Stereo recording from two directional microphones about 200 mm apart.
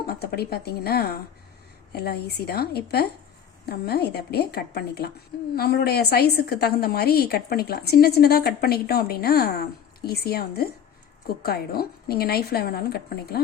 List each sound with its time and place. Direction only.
0.0 s a woman's voice: 50° left (ahead or behind)